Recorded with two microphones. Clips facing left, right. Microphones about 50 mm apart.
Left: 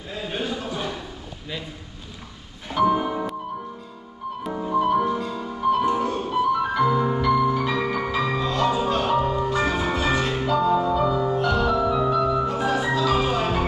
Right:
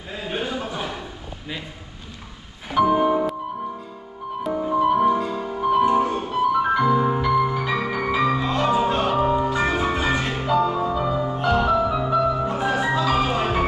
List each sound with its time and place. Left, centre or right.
0.3 s a sound: centre
2.7 s music: centre
4.8 s music: centre
10.3 s music: centre
11.8 s music: centre
12.5 s music: right